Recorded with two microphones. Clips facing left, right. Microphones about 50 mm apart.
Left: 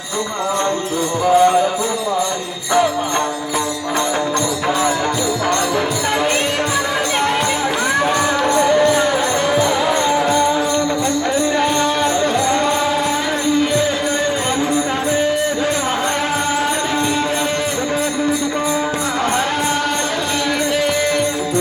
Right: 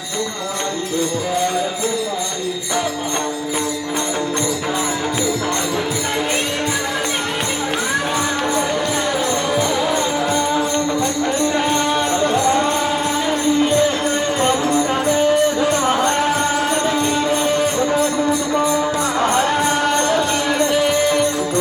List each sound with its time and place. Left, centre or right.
1.4 s music: left
8.4 s music: left
8.7 s music: left